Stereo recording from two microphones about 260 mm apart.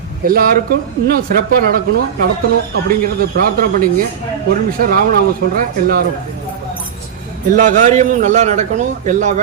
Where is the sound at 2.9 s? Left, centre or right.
Right.